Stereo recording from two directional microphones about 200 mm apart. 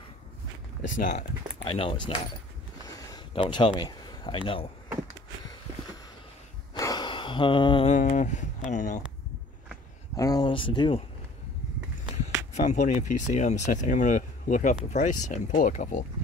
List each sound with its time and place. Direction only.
0.8 s speech: 40° left (ahead or behind)
1.6 s speech: 25° left (ahead or behind)
6.7 s a sound: 20° left (ahead or behind)
7.9 s speech: 35° left (ahead or behind)
10.1 s speech: 20° left (ahead or behind)
12.8 s speech: 35° left (ahead or behind)